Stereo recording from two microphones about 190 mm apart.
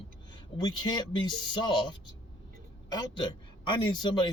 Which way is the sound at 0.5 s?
20° left (ahead or behind).